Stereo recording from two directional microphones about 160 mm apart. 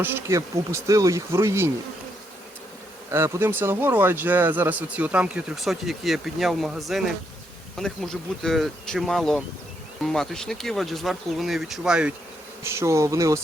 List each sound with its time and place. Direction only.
0.0 s speech: 15° right (ahead or behind)
3.1 s speech: 15° right (ahead or behind)
12.6 s speech: 15° right (ahead or behind)